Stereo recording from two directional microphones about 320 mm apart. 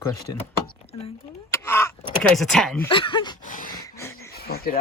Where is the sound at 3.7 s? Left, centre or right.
Centre.